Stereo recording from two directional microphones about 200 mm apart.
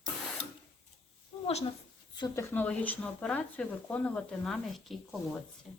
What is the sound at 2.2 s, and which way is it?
Speech, 10° left (ahead or behind).